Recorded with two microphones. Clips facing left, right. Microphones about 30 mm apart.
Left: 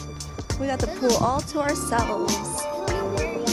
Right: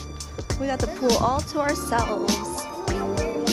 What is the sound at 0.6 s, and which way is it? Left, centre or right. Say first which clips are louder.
Speech: even; centre.